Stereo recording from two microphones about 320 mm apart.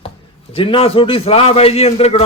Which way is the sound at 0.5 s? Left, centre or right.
Centre.